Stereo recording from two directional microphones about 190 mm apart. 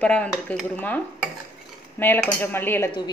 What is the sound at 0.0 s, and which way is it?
Dishes, 5° left (ahead or behind).